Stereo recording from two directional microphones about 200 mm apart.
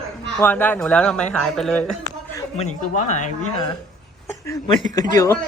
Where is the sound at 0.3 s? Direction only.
10° left (ahead or behind).